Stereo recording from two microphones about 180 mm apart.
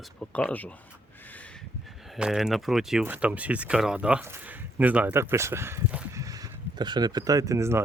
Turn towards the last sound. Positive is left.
turn(degrees=-15)  # may be behind; listen again after turning